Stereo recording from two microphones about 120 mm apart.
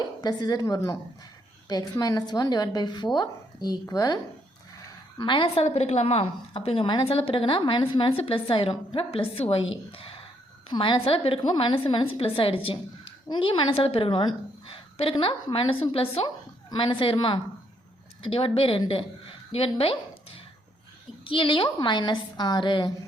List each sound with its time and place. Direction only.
0.2 s a woman's voice: 35° left (ahead or behind)
5.6 s a woman's voice: 60° left (ahead or behind); by 22.9 s 40° left (ahead or behind)